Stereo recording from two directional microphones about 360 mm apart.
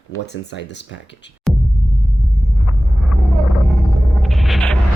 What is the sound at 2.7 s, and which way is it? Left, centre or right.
Vehicle, centre.